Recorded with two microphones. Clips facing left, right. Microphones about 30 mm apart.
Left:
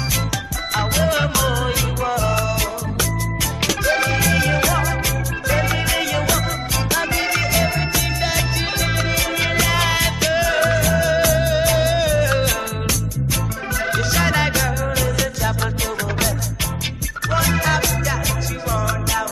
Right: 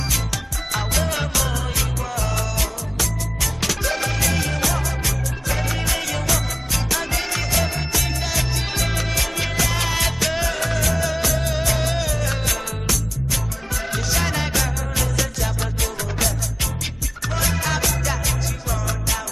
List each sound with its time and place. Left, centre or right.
0.7 s music: centre
3.9 s music: left
9.5 s music: left
9.9 s music: centre
14.3 s music: left
17.4 s music: centre